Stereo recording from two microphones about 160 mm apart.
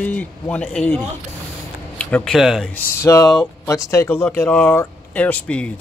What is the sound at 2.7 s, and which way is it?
Speech, 15° left (ahead or behind).